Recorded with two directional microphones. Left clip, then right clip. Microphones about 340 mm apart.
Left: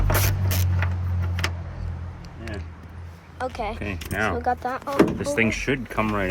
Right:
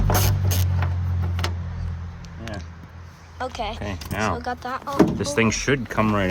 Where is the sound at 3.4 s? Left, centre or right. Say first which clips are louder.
Even; centre.